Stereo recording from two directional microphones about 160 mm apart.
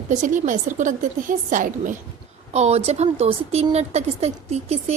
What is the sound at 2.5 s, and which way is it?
A woman's voice, 40° right (ahead or behind).